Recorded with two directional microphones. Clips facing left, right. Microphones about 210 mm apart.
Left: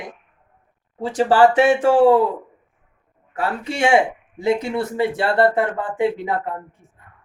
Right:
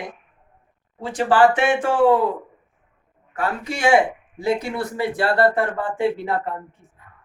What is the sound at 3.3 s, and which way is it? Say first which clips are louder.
Speech: left 3 dB; 30° left (ahead or behind).